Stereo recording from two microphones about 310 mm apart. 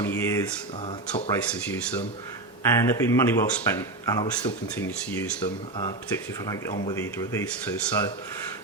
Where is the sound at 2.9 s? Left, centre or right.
Centre.